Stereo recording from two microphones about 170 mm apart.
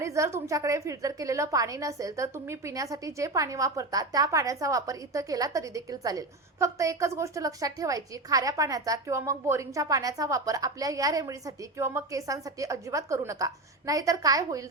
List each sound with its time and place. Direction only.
0.0 s a woman's voice: 15° right (ahead or behind)